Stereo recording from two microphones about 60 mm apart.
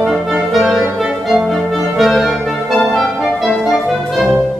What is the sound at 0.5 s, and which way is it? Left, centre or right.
Clarinet, centre.